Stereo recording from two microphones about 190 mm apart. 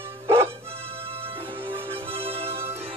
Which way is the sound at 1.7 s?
30° right (ahead or behind).